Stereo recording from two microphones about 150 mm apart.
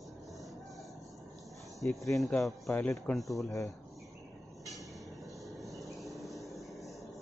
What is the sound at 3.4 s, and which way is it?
Speech, 20° left (ahead or behind).